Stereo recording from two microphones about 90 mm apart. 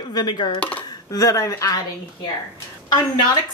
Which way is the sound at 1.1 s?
40° left (ahead or behind).